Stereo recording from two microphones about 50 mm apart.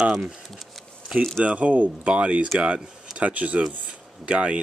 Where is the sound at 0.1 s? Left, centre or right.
Centre.